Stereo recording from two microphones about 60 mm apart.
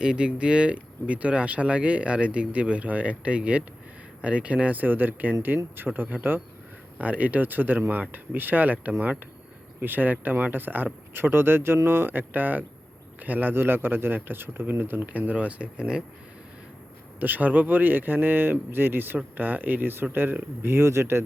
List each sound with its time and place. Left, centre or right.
0.0 s speech: centre
17.2 s speech: right